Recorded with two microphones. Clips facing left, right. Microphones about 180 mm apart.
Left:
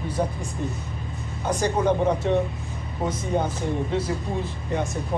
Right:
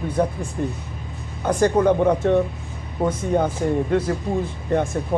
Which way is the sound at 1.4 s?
55° right (ahead or behind).